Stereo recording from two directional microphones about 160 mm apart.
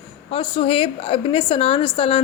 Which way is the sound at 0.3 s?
35° left (ahead or behind).